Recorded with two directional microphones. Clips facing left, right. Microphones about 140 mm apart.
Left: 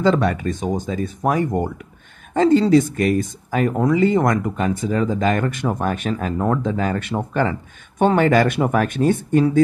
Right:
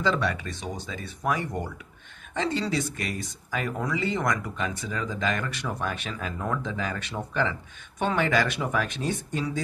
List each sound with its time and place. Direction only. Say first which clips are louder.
0.0 s speech: left 9 dB; 50° left (ahead or behind)